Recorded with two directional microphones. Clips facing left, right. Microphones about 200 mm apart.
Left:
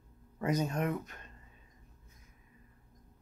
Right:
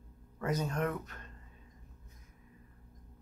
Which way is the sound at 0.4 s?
20° left (ahead or behind).